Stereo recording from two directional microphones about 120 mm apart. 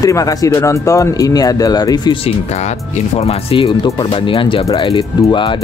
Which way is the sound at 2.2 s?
70° left (ahead or behind).